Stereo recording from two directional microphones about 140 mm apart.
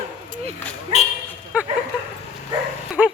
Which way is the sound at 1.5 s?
10° right (ahead or behind).